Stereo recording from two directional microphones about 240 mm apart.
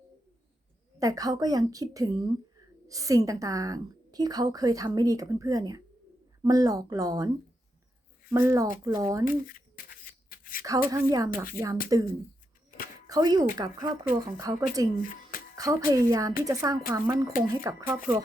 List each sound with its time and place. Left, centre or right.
0.9 s a woman's voice: centre
8.3 s a woman's voice: centre
9.2 s a sound: left
10.8 s a woman's voice: centre
13.1 s a woman's voice: centre
15.0 s music: left
15.5 s a woman's voice: centre